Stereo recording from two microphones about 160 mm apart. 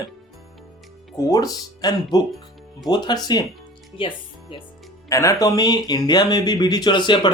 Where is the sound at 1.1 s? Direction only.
20° left (ahead or behind).